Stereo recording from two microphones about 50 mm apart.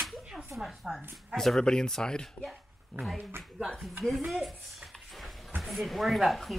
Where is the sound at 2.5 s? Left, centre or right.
Centre.